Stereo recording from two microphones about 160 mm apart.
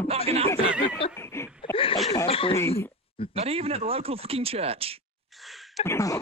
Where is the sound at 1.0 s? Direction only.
35° left (ahead or behind).